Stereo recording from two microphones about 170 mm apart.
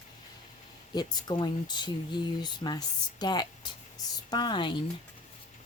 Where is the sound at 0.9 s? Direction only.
25° left (ahead or behind).